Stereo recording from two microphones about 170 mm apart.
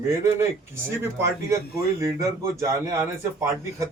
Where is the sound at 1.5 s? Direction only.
15° right (ahead or behind).